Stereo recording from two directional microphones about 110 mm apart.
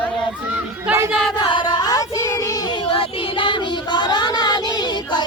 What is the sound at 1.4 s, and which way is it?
Child singing, 45° left (ahead or behind).